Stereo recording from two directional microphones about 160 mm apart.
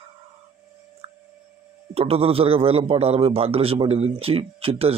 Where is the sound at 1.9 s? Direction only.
40° right (ahead or behind).